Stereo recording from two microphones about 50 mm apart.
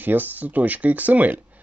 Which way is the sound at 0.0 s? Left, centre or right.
Right.